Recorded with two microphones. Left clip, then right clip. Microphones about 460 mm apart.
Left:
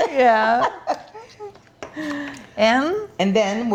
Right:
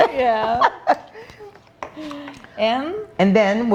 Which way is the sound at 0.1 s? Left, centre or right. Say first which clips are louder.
Left 3 dB; left.